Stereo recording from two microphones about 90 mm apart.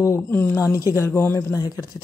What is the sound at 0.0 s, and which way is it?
Speech, 30° left (ahead or behind).